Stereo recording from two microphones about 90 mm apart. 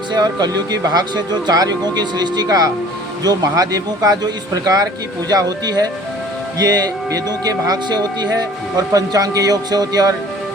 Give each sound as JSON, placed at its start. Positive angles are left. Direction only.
{"t": 0.1, "sound": "speech", "side_deg": -50}